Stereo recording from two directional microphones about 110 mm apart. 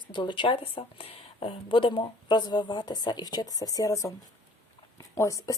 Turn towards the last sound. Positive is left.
turn(degrees=30)  # may be behind; listen again after turning